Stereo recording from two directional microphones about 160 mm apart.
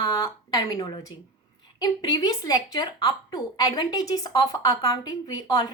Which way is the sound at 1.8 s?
25° left (ahead or behind).